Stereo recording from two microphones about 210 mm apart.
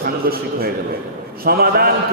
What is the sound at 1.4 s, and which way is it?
Speech, 45° right (ahead or behind).